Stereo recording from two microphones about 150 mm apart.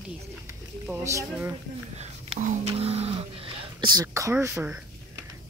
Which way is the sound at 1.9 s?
50° right (ahead or behind).